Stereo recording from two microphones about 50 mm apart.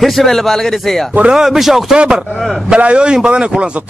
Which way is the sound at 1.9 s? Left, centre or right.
Centre.